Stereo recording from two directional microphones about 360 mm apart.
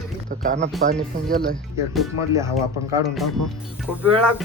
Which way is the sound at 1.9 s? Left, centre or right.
Centre.